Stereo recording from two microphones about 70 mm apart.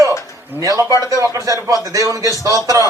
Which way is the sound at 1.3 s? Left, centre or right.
Right.